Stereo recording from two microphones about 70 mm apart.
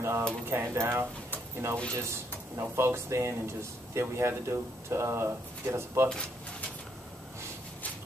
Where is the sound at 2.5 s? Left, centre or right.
Right.